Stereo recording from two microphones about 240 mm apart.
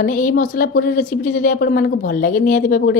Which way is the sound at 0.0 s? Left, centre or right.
Left.